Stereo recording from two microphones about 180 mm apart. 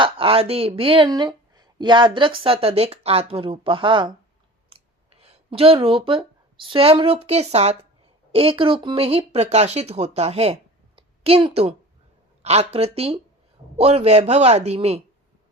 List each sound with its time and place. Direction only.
0.0 s speech: 30° right (ahead or behind)
5.2 s a woman's voice: 30° right (ahead or behind)